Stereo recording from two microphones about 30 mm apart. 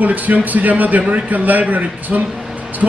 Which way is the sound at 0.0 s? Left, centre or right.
Right.